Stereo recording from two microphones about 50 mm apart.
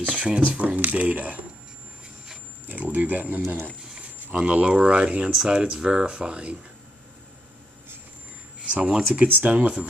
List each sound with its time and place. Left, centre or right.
0.0 s speech: right
2.6 s speech: right
8.6 s a sound: right
9.1 s speech: right